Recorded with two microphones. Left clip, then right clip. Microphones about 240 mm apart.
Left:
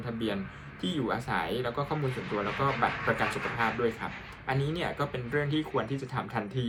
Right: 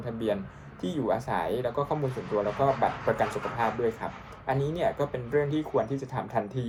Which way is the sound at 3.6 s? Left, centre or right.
Left.